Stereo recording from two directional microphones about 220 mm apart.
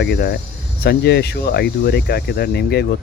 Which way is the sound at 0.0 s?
45° left (ahead or behind).